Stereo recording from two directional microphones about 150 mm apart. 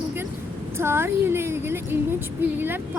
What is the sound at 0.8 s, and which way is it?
Speech, 15° right (ahead or behind).